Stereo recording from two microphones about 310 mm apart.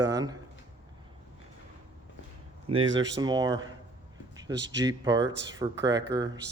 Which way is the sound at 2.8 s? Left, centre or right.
Right.